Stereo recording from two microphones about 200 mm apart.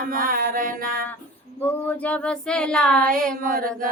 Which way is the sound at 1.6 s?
10° left (ahead or behind).